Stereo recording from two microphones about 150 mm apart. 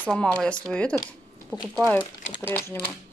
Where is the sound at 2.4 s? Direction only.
15° left (ahead or behind).